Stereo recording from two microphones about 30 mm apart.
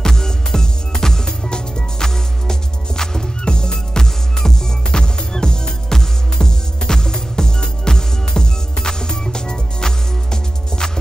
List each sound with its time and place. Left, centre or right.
0.0 s music: centre